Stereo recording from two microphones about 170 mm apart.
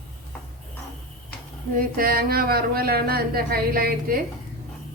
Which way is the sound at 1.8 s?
60° right (ahead or behind).